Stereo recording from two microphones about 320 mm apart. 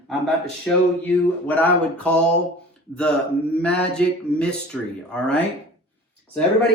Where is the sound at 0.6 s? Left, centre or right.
Centre.